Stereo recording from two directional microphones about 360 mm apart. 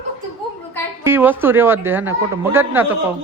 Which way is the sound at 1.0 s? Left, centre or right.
Centre.